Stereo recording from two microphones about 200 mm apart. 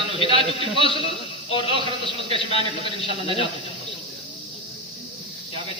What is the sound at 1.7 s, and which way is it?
A man's voice, 25° right (ahead or behind).